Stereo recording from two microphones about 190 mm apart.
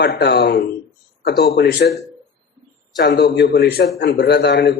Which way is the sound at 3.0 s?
60° left (ahead or behind).